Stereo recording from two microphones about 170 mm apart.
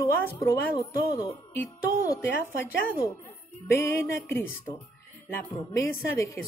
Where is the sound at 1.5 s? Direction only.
15° left (ahead or behind).